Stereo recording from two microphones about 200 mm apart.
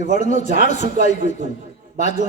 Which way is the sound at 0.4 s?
45° right (ahead or behind).